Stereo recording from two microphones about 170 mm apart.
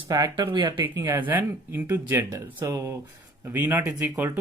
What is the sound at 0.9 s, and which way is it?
Speech, 15° right (ahead or behind).